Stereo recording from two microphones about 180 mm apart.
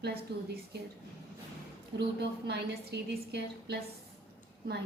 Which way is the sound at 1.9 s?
65° right (ahead or behind).